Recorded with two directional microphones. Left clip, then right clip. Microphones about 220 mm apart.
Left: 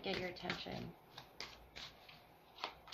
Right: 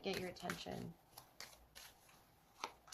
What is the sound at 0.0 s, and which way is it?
Shuffling cards, 50° right (ahead or behind).